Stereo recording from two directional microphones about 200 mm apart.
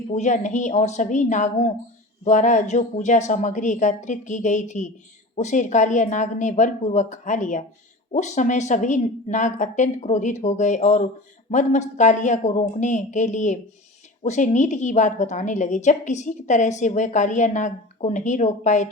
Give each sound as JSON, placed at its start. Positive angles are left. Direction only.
{"t": 0.1, "sound": "a woman's voice", "side_deg": 35}